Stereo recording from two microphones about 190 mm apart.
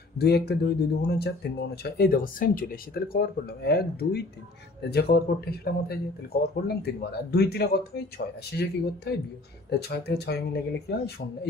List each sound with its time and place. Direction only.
0.2 s speech: 55° left (ahead or behind)